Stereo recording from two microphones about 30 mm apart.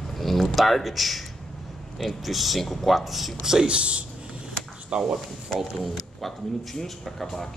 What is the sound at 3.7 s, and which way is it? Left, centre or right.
Speech, right.